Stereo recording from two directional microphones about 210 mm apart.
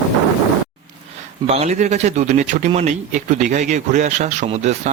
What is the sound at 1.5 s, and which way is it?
A man's voice, 30° right (ahead or behind).